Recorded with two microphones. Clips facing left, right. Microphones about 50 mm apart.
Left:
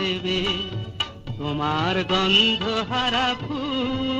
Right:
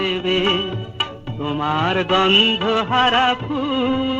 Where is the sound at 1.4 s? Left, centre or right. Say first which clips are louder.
Right 4 dB; centre.